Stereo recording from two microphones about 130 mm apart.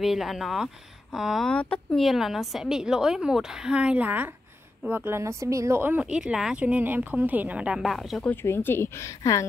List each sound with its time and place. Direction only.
0.0 s a woman's voice: centre (ahead or behind)
8.2 s speech: 15° left (ahead or behind)